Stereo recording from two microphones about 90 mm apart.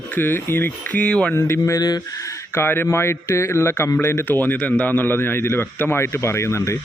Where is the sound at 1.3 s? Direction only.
35° left (ahead or behind).